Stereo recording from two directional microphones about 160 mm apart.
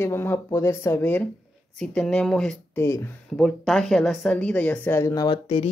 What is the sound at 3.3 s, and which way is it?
Speech, centre (ahead or behind).